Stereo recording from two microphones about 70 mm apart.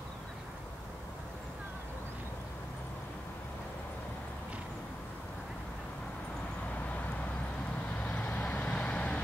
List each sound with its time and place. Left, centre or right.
7.9 s vehicle: left